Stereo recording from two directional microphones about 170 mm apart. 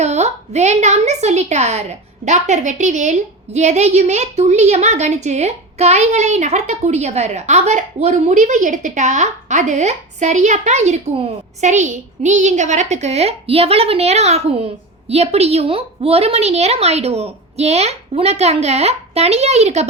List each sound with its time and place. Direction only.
0.0 s a woman's voice: 40° right (ahead or behind)